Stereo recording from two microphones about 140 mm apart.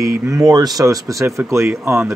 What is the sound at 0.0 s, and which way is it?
Speech, 25° right (ahead or behind).